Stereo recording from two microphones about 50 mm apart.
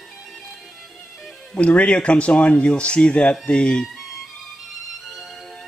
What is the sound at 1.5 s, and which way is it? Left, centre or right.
Speech, left.